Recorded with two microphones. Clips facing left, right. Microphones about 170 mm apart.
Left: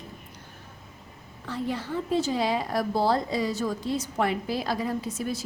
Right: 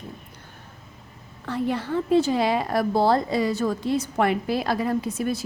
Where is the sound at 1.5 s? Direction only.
60° right (ahead or behind).